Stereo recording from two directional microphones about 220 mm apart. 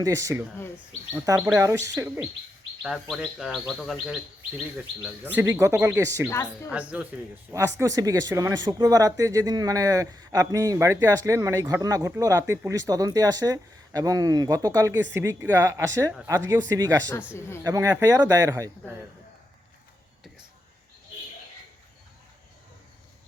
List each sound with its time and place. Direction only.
0.0 s speech: 15° right (ahead or behind)
2.8 s bird: centre (ahead or behind)
5.0 s speech: 10° right (ahead or behind)
6.7 s bird: 5° right (ahead or behind)
7.5 s speech: 15° right (ahead or behind)